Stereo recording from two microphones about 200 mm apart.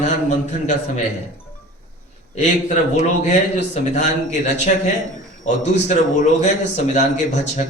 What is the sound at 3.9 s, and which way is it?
Speech, 35° left (ahead or behind).